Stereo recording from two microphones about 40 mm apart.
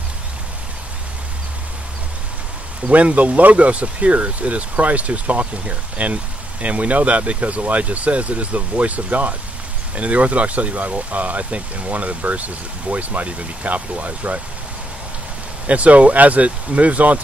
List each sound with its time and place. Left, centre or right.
2.9 s speech: right
15.6 s speech: right